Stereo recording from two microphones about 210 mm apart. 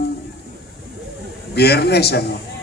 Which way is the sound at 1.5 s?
50° left (ahead or behind).